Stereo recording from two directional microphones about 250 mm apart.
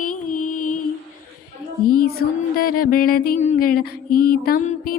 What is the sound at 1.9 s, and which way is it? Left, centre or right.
Music, left.